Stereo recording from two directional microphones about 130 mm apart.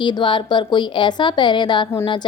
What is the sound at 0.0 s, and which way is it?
A woman's voice, 40° left (ahead or behind).